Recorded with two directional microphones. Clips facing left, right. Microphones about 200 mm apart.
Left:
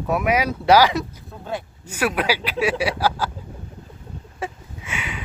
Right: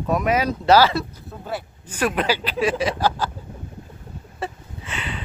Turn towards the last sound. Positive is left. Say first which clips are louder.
# even
turn(degrees=10)  # may be behind; listen again after turning